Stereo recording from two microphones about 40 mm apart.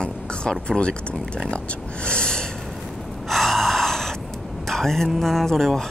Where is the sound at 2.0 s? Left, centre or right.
Centre.